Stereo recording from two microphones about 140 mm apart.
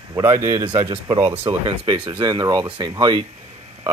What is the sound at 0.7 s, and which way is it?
Speech, 35° right (ahead or behind).